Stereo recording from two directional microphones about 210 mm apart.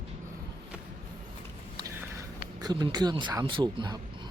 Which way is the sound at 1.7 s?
15° right (ahead or behind).